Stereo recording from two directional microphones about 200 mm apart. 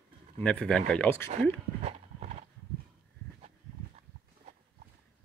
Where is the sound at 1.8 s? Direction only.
35° right (ahead or behind).